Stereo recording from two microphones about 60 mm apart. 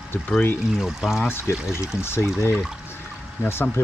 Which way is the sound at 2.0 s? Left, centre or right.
Left.